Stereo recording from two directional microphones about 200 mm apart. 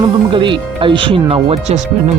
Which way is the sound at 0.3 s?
25° right (ahead or behind).